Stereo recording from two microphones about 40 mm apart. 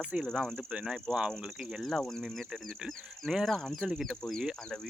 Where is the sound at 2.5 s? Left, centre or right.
Centre.